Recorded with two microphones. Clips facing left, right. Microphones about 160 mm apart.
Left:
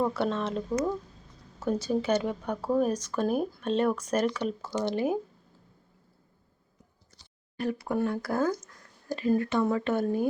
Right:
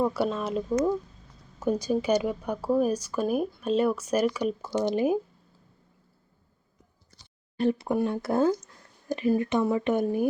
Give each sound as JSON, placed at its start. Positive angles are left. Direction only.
{"t": 0.0, "sound": "speech", "side_deg": -10}
{"t": 7.6, "sound": "speech", "side_deg": -25}